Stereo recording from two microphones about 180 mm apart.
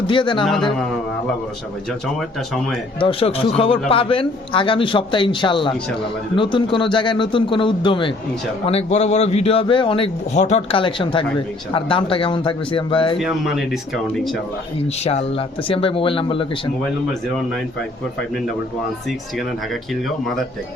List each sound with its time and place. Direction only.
0.1 s a man's voice: 25° left (ahead or behind)
0.4 s speech: centre (ahead or behind)
3.0 s a man's voice: 30° left (ahead or behind)
13.1 s speech: centre (ahead or behind)
15.0 s speech: 35° left (ahead or behind)
19.9 s speech: centre (ahead or behind)